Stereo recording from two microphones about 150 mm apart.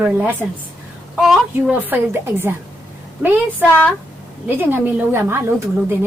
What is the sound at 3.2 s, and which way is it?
A woman's voice, 10° right (ahead or behind).